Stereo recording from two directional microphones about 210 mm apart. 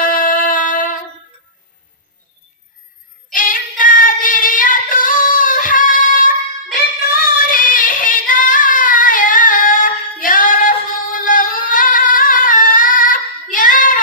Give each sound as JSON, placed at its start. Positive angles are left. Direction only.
{"t": 0.0, "sound": "a sound", "side_deg": 40}
{"t": 3.3, "sound": "child singing", "side_deg": 40}
{"t": 7.2, "sound": "singing", "side_deg": 40}